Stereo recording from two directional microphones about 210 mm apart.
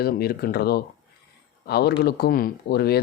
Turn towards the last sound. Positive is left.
turn(degrees=50)  # may be behind; listen again after turning